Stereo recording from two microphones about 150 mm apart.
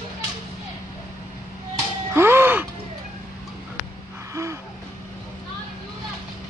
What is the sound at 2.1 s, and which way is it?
Music, 15° right (ahead or behind).